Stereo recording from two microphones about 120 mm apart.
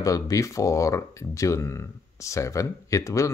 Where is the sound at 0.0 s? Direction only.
30° left (ahead or behind).